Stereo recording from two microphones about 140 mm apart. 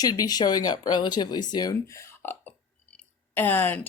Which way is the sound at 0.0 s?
25° left (ahead or behind).